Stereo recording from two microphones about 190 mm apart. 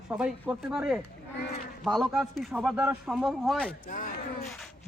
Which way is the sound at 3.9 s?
40° left (ahead or behind).